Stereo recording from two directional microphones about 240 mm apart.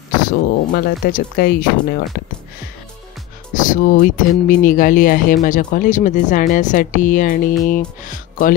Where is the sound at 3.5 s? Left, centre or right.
Left.